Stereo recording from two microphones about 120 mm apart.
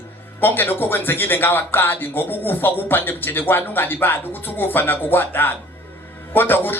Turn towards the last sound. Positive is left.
turn(degrees=15)  # may be behind; listen again after turning